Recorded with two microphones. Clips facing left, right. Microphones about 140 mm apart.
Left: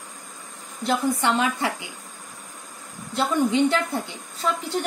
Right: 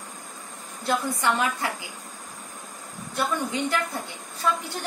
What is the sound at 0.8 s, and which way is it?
A woman's voice, 20° left (ahead or behind).